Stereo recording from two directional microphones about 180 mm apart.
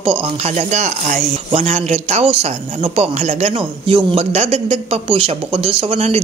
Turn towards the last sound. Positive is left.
turn(degrees=-35)  # may be behind; listen again after turning